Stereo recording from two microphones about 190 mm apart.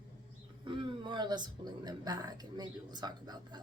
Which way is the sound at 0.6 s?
25° right (ahead or behind).